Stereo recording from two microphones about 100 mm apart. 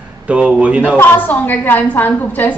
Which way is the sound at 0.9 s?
20° left (ahead or behind).